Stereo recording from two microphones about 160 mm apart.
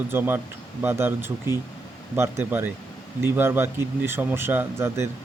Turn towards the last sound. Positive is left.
turn(degrees=-15)  # may be behind; listen again after turning